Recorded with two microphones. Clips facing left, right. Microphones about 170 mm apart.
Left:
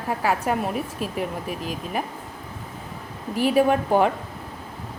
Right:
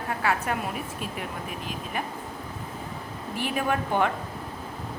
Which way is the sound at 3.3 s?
40° left (ahead or behind).